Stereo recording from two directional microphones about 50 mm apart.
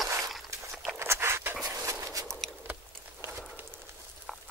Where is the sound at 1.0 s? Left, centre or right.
Right.